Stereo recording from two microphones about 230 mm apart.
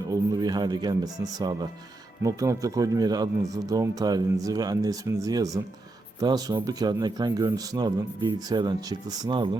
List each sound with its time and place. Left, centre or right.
0.1 s speech: centre